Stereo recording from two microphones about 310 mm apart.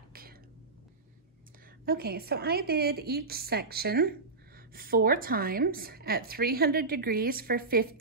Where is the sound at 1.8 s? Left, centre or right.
Right.